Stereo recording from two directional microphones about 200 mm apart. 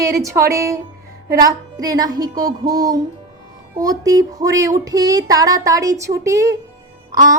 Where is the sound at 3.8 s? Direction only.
20° right (ahead or behind).